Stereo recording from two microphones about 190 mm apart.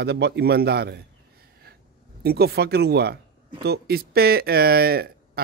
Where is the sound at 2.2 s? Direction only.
55° right (ahead or behind).